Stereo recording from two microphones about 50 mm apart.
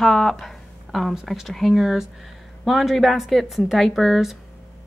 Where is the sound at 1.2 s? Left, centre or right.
Centre.